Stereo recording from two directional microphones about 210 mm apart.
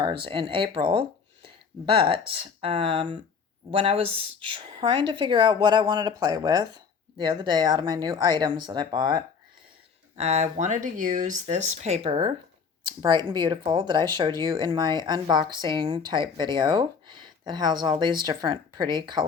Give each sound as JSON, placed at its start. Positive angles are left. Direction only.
{"t": 0.0, "sound": "speech", "side_deg": -25}
{"t": 10.2, "sound": "speech", "side_deg": -30}